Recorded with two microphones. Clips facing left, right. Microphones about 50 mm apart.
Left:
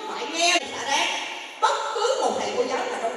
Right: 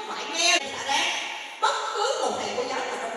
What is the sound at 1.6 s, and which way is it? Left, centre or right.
Chuckle, centre.